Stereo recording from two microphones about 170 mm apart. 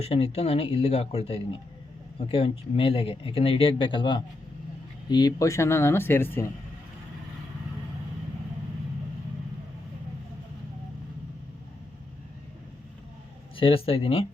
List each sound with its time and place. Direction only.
0.0 s speech: 35° left (ahead or behind); by 6.5 s 15° left (ahead or behind)
13.6 s speech: 30° left (ahead or behind)